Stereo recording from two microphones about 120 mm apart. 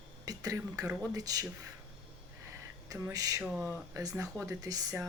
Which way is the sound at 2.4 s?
25° right (ahead or behind).